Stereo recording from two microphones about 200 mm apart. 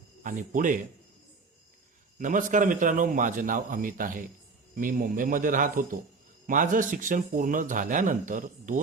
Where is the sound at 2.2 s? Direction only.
40° right (ahead or behind).